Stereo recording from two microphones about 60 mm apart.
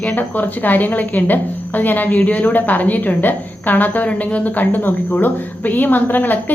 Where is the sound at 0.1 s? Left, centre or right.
Left.